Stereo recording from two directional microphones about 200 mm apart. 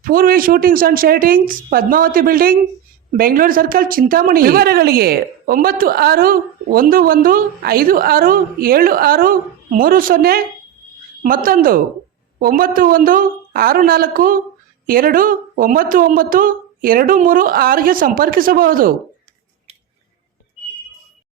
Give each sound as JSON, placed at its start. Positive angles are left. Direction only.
{"t": 0.0, "sound": "a woman's voice", "side_deg": -45}